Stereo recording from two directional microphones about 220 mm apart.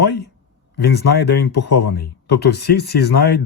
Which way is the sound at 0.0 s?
45° left (ahead or behind).